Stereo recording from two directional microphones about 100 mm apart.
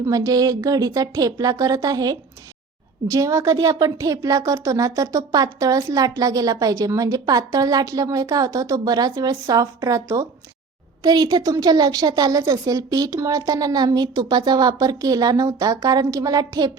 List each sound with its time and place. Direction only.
0.0 s a woman's voice: 35° right (ahead or behind)